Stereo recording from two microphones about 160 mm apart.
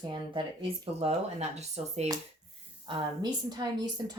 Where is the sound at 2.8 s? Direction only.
30° right (ahead or behind).